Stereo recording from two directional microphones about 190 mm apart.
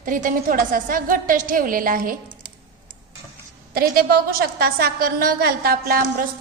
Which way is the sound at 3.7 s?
50° right (ahead or behind).